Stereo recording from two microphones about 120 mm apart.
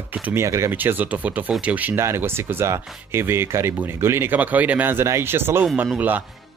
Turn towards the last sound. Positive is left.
turn(degrees=-15)  # may be behind; listen again after turning